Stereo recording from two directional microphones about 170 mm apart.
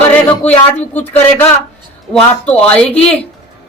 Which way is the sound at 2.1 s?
5° left (ahead or behind).